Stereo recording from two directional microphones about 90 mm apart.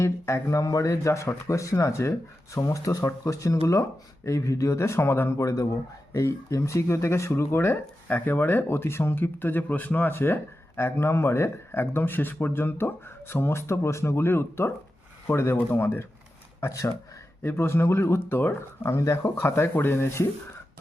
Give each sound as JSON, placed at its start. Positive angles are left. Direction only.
{"t": 0.0, "sound": "speech", "side_deg": 30}
{"t": 16.6, "sound": "speech", "side_deg": 35}